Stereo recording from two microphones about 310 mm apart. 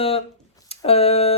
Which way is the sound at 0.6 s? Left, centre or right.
Centre.